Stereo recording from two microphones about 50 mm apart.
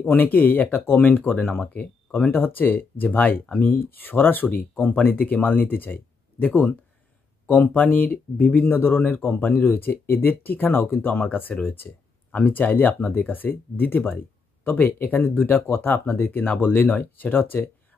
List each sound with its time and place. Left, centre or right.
0.0 s speech: left
1.7 s speech: left
2.3 s speech: left